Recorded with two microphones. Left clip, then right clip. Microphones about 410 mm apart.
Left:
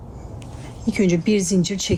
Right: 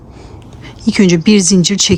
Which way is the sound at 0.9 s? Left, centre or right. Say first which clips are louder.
Right 9 dB; right.